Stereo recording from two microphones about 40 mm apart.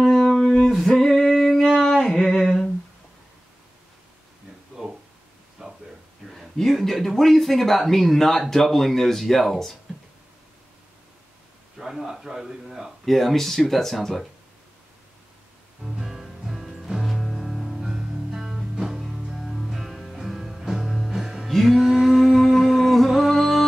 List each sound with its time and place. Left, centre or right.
0.0 s a sound: centre
0.7 s singing: centre
1.8 s humming: centre
5.6 s a sound: centre
6.3 s speech: centre
11.8 s a man's voice: centre
13.0 s speech: centre
15.8 s music: centre
21.5 s a sound: centre
23.0 s music: centre